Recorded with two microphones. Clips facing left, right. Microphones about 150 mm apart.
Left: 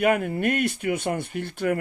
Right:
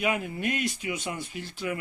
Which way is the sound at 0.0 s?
55° left (ahead or behind).